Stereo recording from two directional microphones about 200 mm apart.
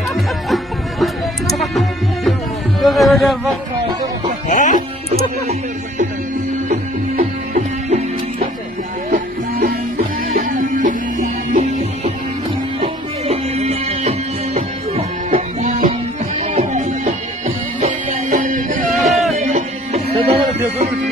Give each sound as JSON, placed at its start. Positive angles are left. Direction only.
{"t": 0.1, "sound": "music", "side_deg": 0}
{"t": 2.8, "sound": "speech", "side_deg": 0}
{"t": 4.5, "sound": "music", "side_deg": 40}
{"t": 6.7, "sound": "music", "side_deg": -35}
{"t": 9.1, "sound": "music", "side_deg": -45}